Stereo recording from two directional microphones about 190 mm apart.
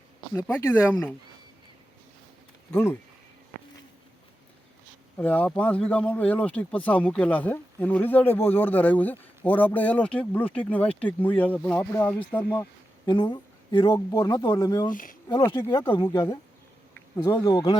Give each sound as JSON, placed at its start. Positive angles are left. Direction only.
{"t": 0.6, "sound": "speech", "side_deg": 10}
{"t": 2.7, "sound": "speech", "side_deg": 10}
{"t": 5.1, "sound": "speech", "side_deg": 10}
{"t": 13.1, "sound": "speech", "side_deg": 25}